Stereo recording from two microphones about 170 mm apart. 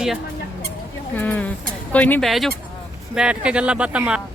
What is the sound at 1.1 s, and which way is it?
Speech, 10° left (ahead or behind).